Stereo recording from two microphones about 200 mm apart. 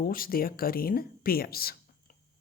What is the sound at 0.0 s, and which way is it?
Speech, 45° left (ahead or behind).